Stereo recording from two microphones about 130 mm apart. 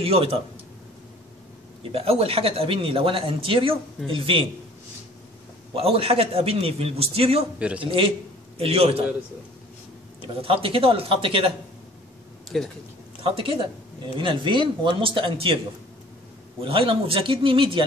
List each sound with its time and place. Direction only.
0.0 s speech: 50° right (ahead or behind)
1.8 s speech: 45° right (ahead or behind)
5.8 s speech: 50° right (ahead or behind)
7.5 s speech: 10° right (ahead or behind)
7.8 s speech: 45° right (ahead or behind)
10.2 s speech: 45° right (ahead or behind)
12.4 s speech: 5° left (ahead or behind)
13.2 s speech: 40° right (ahead or behind)
16.6 s speech: 45° right (ahead or behind)